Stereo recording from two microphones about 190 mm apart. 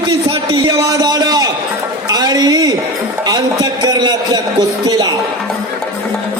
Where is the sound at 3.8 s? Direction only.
20° right (ahead or behind).